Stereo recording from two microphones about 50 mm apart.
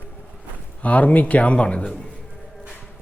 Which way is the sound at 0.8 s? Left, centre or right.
Left.